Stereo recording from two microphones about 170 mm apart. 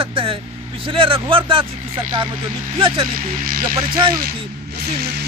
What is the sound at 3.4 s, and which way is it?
Speech, 55° right (ahead or behind).